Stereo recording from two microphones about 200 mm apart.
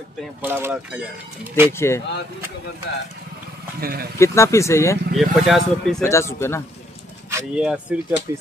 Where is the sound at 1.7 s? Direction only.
15° left (ahead or behind).